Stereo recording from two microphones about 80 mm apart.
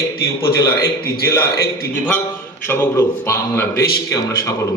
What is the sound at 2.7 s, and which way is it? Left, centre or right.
A man's voice, left.